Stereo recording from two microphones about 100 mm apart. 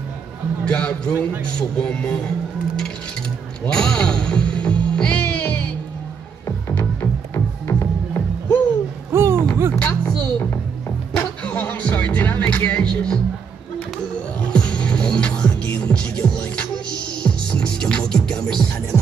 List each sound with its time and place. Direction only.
0.7 s a man's voice: 10° left (ahead or behind)
3.6 s music: 10° left (ahead or behind)
7.0 s music: 30° left (ahead or behind)
9.1 s a sound: 25° right (ahead or behind)
9.8 s music: 15° left (ahead or behind)
14.4 s music: 10° left (ahead or behind)